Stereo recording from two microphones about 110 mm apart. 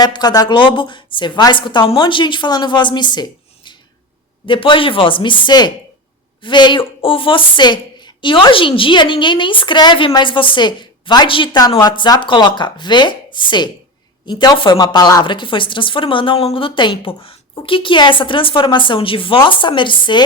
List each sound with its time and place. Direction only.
0.0 s speech: 40° left (ahead or behind)
11.9 s speech: 40° left (ahead or behind)